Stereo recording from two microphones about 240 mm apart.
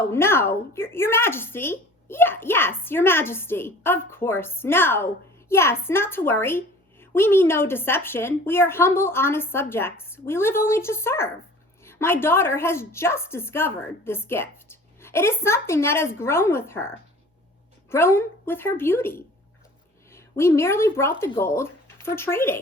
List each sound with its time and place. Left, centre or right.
0.1 s a woman's voice: centre
17.9 s a woman's voice: centre